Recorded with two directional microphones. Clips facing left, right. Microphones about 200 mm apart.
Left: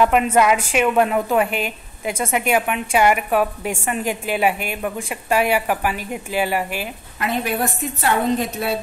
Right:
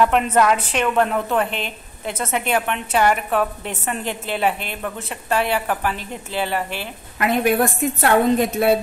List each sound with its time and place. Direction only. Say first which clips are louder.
0.0 s a woman's voice: left 1 dB; 10° left (ahead or behind)
7.2 s a woman's voice: right 5 dB; 55° right (ahead or behind)